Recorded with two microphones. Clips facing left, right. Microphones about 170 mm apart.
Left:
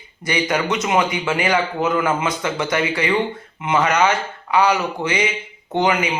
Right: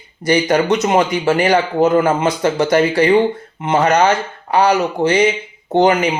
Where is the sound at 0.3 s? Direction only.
40° right (ahead or behind).